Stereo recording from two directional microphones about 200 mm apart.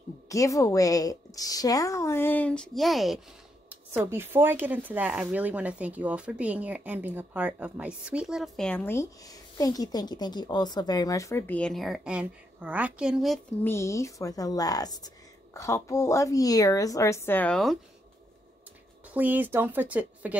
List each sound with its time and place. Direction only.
0.3 s speech: 15° left (ahead or behind); by 13.4 s centre (ahead or behind)
13.7 s speech: 15° left (ahead or behind)
19.1 s speech: 10° right (ahead or behind)